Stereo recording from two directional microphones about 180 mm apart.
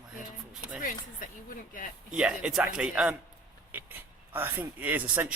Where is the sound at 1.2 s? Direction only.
50° left (ahead or behind).